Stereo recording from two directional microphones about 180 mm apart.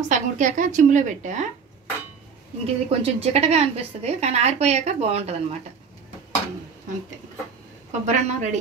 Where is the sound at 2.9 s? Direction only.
35° right (ahead or behind).